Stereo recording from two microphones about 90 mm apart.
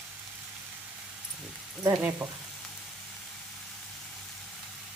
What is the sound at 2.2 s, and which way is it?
Frying, 60° right (ahead or behind).